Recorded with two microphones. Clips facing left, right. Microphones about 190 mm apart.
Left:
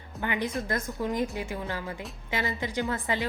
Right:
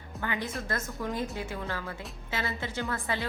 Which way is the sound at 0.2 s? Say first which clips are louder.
Left 4 dB; 15° left (ahead or behind).